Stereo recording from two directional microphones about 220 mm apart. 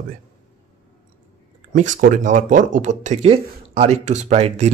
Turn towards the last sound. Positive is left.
turn(degrees=-30)  # may be behind; listen again after turning